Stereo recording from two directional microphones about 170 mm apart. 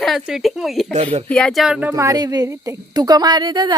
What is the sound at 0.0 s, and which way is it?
Speech, centre (ahead or behind).